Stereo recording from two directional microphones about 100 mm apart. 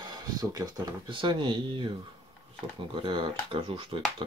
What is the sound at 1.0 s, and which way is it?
Speech, 55° right (ahead or behind).